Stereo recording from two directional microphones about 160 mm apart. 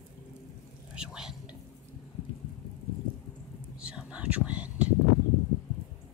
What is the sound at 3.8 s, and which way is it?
Whispering, 5° right (ahead or behind).